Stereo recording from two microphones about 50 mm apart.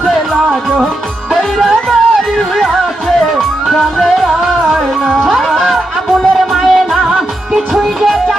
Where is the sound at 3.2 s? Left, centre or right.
Centre.